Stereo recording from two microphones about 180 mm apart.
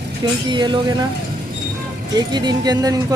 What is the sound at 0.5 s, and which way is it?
Speech, 25° right (ahead or behind).